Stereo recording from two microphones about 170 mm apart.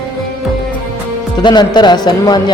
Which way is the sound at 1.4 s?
25° left (ahead or behind).